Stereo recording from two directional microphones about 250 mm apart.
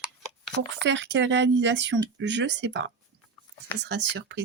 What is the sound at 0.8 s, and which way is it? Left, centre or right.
Speech, right.